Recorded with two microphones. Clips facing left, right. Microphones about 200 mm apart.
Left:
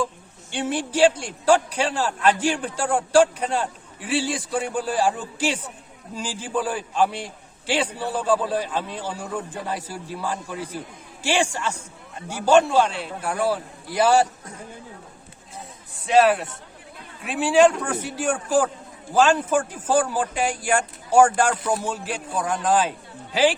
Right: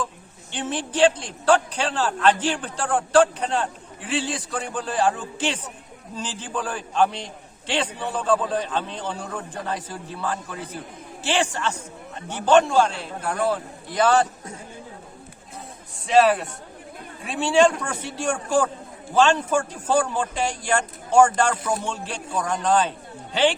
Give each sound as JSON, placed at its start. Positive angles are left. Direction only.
{"t": 0.5, "sound": "a man's voice", "side_deg": 10}
{"t": 16.0, "sound": "a man's voice", "side_deg": 0}